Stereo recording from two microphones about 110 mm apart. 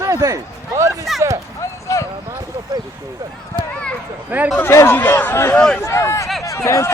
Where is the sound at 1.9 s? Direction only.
30° left (ahead or behind).